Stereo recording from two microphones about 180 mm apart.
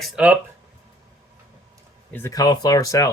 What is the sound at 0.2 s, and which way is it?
Speech, 5° right (ahead or behind).